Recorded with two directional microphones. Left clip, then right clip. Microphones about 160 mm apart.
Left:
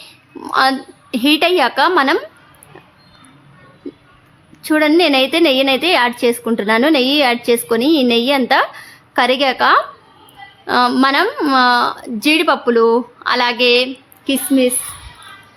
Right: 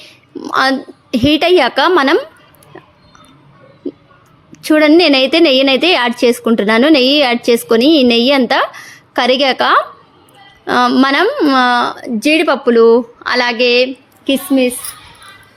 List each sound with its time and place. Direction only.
0.5 s a woman's voice: 20° right (ahead or behind)
4.6 s a woman's voice: 25° right (ahead or behind)
11.3 s a woman's voice: 15° right (ahead or behind)
14.3 s a woman's voice: 5° right (ahead or behind)